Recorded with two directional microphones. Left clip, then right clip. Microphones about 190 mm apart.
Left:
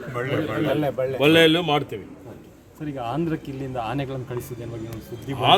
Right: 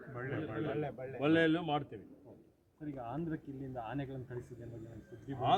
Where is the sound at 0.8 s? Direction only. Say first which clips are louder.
Left 17 dB; 25° left (ahead or behind).